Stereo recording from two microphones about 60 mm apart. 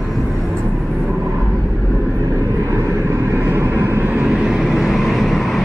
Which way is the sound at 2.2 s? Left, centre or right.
Right.